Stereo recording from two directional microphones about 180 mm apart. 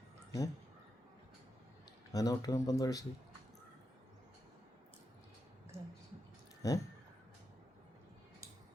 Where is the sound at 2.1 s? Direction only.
20° left (ahead or behind).